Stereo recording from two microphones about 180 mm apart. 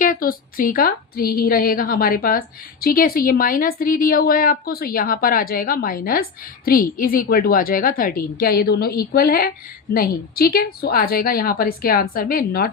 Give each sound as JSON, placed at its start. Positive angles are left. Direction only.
{"t": 0.0, "sound": "a woman's voice", "side_deg": 50}